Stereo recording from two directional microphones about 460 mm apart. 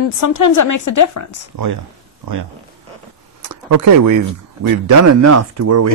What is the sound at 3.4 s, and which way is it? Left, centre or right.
Speech, right.